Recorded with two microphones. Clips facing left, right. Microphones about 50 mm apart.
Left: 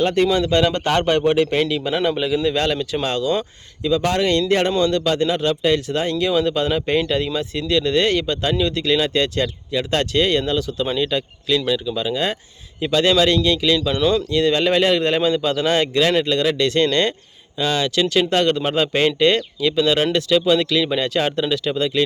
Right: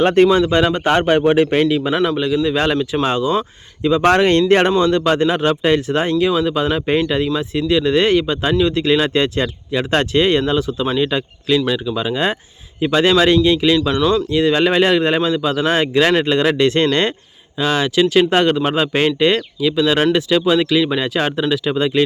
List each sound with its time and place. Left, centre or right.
0.0 s speech: right
0.3 s speech: centre
1.6 s speech: centre
2.0 s a man's voice: centre
2.7 s speech: centre
4.0 s speech: right
4.8 s speech: right
6.3 s speech: centre
14.0 s a man's voice: centre
14.3 s speech: centre
15.2 s speech: centre
16.0 s speech: right